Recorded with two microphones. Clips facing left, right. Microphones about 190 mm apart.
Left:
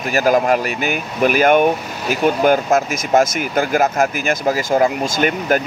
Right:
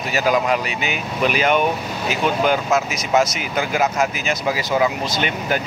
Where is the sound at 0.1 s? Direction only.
50° left (ahead or behind).